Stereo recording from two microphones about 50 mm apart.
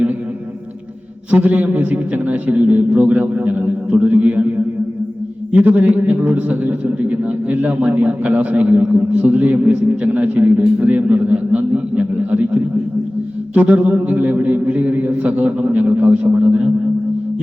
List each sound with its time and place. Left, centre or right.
1.3 s a man's voice: right